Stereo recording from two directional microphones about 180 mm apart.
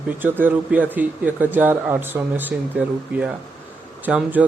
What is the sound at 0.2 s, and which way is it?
A man's voice, 10° right (ahead or behind).